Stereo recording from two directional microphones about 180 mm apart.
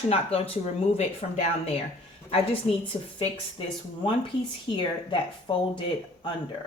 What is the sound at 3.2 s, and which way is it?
Speech, 30° left (ahead or behind).